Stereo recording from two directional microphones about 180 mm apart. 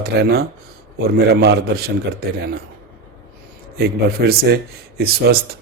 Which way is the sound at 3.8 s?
60° right (ahead or behind).